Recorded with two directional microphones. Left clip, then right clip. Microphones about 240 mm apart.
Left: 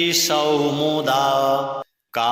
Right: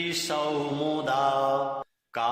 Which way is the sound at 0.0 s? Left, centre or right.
Left.